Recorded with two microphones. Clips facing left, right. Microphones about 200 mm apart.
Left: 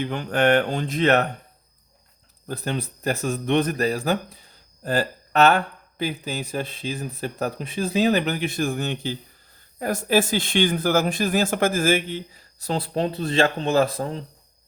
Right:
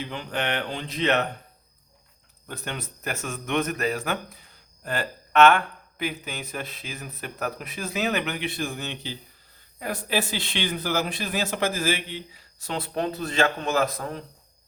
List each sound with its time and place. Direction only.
0.0 s speech: 50° left (ahead or behind)
2.5 s speech: 35° left (ahead or behind)